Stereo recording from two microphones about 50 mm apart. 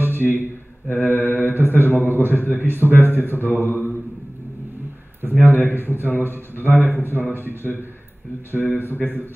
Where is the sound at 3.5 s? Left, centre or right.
Right.